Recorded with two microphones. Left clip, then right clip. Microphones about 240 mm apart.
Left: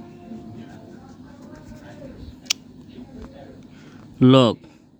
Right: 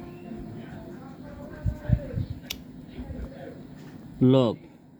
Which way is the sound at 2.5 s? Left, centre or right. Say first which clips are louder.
Left 13 dB; left.